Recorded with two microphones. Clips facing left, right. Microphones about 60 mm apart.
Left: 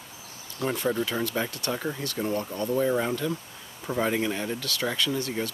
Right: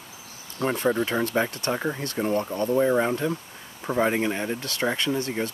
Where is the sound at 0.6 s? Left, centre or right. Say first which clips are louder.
Right 3 dB; right.